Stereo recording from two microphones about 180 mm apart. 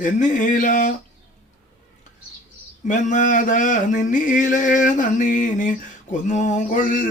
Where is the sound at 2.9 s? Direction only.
45° left (ahead or behind).